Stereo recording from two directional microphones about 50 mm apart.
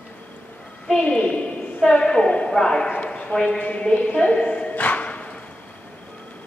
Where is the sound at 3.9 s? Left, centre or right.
Left.